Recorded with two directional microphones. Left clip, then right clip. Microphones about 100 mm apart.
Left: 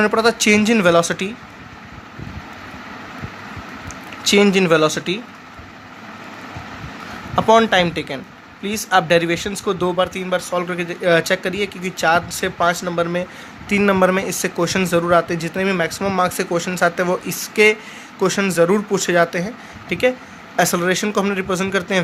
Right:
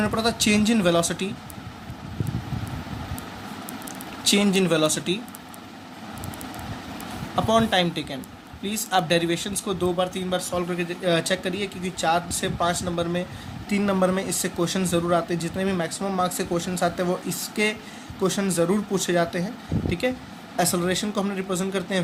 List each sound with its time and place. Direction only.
0.0 s speech: 65° left (ahead or behind)
4.3 s speech: 60° left (ahead or behind)
7.3 s speech: 60° left (ahead or behind)
13.7 s speech: 90° left